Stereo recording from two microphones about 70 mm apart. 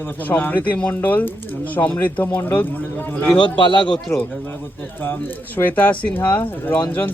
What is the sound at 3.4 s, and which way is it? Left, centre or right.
Speech, left.